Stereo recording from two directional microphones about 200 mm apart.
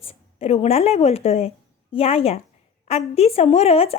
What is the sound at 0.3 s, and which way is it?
A woman's voice, 30° left (ahead or behind).